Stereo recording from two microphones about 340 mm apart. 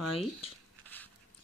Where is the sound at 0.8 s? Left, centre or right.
Centre.